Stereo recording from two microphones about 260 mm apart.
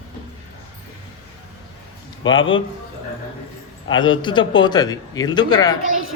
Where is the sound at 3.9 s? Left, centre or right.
Centre.